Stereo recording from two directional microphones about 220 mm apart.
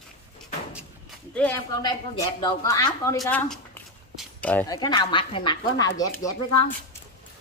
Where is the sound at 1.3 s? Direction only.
10° left (ahead or behind).